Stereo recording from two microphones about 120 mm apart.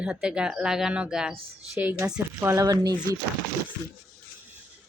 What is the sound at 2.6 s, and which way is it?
Speech, 30° right (ahead or behind).